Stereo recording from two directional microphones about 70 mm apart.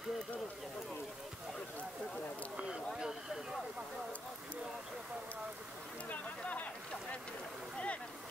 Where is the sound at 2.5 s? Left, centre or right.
Centre.